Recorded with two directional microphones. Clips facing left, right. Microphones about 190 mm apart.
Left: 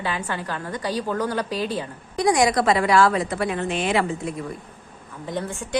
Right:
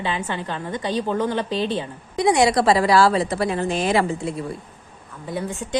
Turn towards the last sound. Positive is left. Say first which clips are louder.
# right 1 dB
turn(degrees=-20)  # may be behind; listen again after turning